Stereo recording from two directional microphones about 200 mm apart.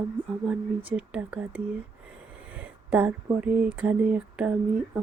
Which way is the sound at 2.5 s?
10° right (ahead or behind).